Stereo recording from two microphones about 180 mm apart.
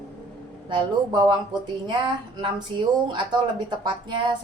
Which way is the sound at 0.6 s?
25° right (ahead or behind).